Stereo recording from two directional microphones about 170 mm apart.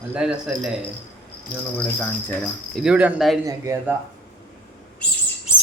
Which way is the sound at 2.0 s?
5° left (ahead or behind).